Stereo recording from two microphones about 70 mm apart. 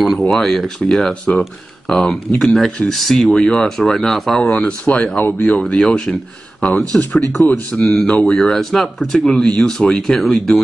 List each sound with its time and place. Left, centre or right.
0.2 s speech: centre
4.6 s speech: centre
7.7 s speech: centre